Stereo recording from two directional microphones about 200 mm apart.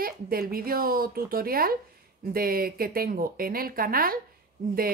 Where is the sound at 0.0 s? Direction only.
45° right (ahead or behind).